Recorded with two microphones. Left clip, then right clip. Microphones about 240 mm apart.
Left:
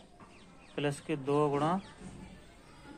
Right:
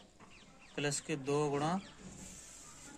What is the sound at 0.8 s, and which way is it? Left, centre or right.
Speech, right.